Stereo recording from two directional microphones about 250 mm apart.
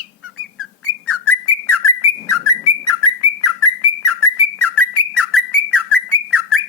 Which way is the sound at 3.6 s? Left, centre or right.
Left.